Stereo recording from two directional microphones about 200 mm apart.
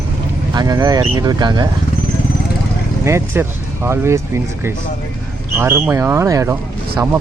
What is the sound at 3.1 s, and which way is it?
Speech, 10° right (ahead or behind).